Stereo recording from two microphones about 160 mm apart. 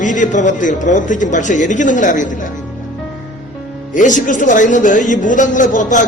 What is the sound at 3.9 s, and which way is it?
A man's voice, 50° left (ahead or behind).